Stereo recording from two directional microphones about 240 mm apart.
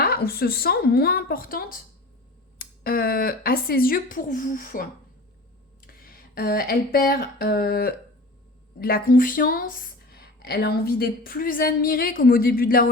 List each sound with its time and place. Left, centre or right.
0.0 s a woman's voice: left